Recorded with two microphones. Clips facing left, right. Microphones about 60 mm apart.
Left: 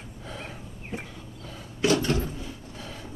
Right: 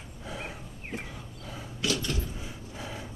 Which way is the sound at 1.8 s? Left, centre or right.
Left.